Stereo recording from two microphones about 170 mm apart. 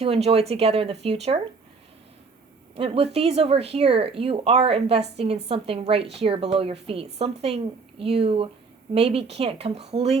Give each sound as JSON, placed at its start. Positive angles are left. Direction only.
{"t": 0.0, "sound": "speech", "side_deg": -35}
{"t": 2.7, "sound": "speech", "side_deg": -35}